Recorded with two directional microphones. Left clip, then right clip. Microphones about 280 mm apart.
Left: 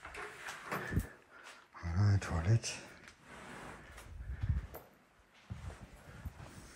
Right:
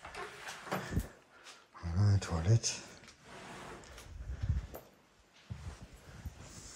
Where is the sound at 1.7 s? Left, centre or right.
Centre.